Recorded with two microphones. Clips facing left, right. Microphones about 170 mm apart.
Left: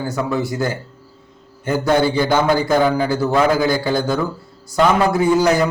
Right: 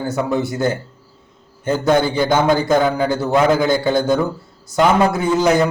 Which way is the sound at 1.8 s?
20° right (ahead or behind).